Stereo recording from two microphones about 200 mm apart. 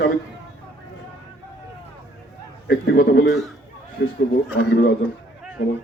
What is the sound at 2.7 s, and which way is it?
A man's voice, 50° left (ahead or behind).